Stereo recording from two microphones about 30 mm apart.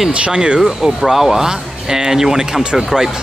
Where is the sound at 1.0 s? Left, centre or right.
Centre.